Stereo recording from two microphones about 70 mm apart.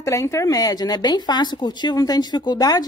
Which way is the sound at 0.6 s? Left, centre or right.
Left.